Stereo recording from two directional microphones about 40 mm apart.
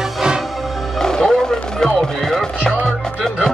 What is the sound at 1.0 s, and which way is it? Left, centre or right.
Music, centre.